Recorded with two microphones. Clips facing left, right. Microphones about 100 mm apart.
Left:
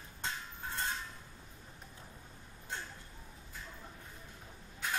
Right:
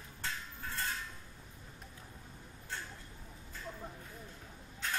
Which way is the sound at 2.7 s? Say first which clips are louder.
Left 1 dB; 20° left (ahead or behind).